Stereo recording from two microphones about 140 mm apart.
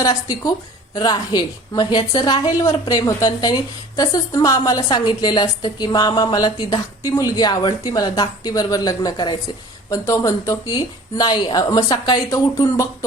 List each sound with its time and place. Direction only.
0.0 s a woman's voice: 25° left (ahead or behind)